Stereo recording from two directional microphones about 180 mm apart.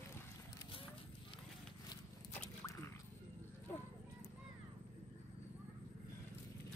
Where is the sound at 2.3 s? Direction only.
15° left (ahead or behind).